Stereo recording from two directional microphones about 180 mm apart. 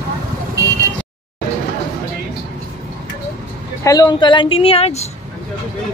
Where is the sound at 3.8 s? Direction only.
20° left (ahead or behind).